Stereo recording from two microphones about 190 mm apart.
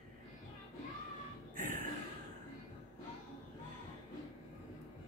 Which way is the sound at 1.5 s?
45° right (ahead or behind).